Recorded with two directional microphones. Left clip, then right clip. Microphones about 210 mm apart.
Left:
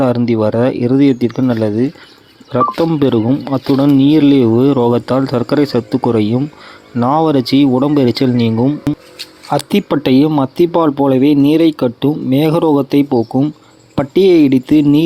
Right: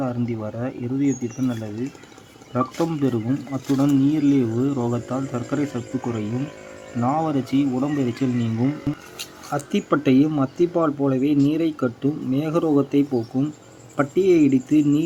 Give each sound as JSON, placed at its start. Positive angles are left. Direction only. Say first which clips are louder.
{"t": 0.0, "sound": "speech", "louder": "left 14 dB", "side_deg": 35}